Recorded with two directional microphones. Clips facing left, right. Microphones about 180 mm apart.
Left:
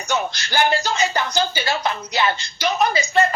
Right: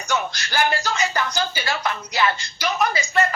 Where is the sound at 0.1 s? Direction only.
25° left (ahead or behind).